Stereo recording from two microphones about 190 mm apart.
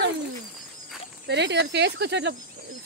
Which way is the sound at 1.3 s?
65° right (ahead or behind).